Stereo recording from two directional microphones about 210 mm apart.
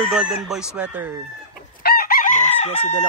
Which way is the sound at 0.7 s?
5° right (ahead or behind).